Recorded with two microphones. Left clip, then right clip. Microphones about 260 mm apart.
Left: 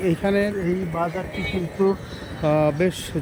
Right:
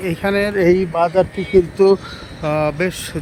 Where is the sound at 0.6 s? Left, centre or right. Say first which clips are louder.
Right 10 dB; right.